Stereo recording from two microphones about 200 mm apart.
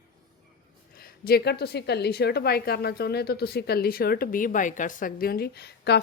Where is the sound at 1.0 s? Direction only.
50° left (ahead or behind).